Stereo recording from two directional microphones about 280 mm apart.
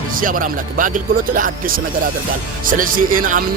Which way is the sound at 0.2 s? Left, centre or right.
Right.